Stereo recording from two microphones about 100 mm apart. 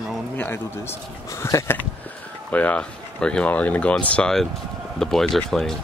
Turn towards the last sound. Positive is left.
turn(degrees=5)  # may be behind; listen again after turning